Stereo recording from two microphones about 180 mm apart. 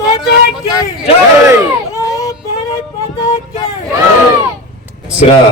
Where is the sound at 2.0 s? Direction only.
15° left (ahead or behind).